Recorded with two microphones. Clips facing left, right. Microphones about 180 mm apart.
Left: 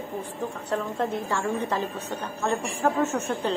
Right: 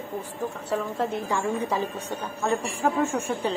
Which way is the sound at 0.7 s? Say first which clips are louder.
Even; 5° right (ahead or behind).